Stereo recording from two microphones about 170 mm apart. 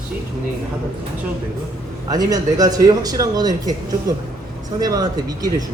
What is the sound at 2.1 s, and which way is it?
A man's voice, 20° right (ahead or behind).